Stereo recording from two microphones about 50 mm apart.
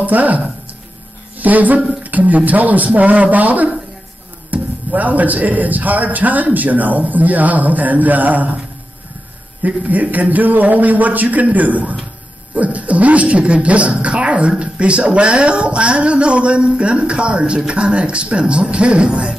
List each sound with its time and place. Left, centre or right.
0.0 s speech: right
1.4 s speech: right
9.6 s speech: right